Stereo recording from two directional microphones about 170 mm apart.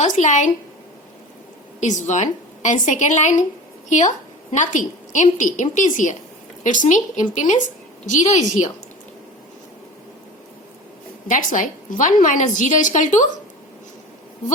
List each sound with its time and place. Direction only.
0.0 s a woman's voice: 45° left (ahead or behind)
1.8 s a woman's voice: 45° left (ahead or behind)
11.3 s a woman's voice: 50° left (ahead or behind)